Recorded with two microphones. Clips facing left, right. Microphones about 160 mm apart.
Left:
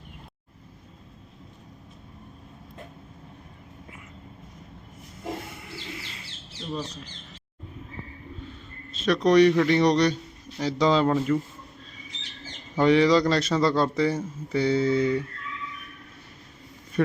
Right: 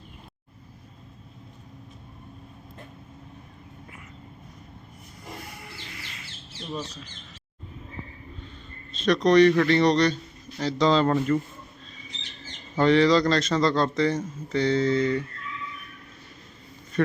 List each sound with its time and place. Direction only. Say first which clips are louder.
5.5 s chirp: left 3 dB; 25° left (ahead or behind)
8.9 s a man's voice: right 1 dB; 5° left (ahead or behind)
12.7 s a man's voice: even; 10° left (ahead or behind)